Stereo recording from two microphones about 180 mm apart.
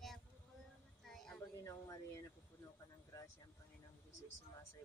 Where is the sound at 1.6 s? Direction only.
20° left (ahead or behind).